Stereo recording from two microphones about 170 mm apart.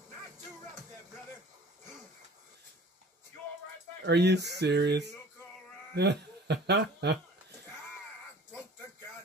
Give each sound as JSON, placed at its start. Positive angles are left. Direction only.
{"t": 4.0, "sound": "speech", "side_deg": -80}